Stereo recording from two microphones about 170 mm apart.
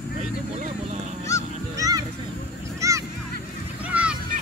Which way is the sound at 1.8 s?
20° right (ahead or behind).